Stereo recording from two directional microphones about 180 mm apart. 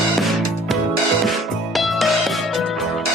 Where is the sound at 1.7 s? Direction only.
Centre (ahead or behind).